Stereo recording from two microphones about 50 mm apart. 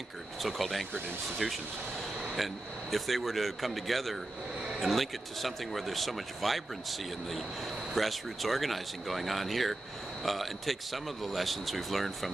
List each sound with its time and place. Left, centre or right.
0.4 s speech: centre